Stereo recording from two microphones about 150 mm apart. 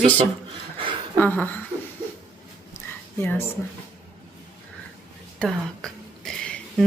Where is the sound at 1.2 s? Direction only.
10° left (ahead or behind).